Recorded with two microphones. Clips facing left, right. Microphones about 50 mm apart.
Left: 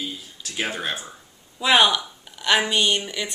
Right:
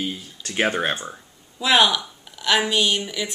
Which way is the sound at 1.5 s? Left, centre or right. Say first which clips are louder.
Even; centre.